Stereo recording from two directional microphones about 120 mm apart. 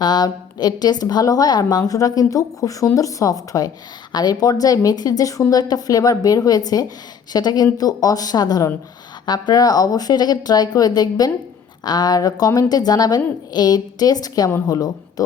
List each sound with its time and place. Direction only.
0.0 s a woman's voice: 35° left (ahead or behind)